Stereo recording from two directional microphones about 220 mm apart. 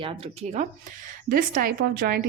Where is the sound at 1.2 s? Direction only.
40° right (ahead or behind).